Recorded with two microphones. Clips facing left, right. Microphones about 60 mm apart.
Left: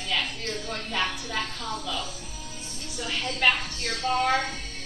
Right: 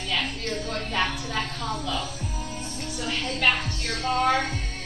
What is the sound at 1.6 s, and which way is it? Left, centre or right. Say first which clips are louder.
A woman's voice: right 3 dB; centre.